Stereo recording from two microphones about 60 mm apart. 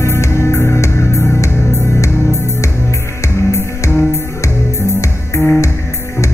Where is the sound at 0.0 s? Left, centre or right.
Left.